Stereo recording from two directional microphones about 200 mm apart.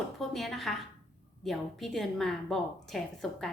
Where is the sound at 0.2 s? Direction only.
Centre (ahead or behind).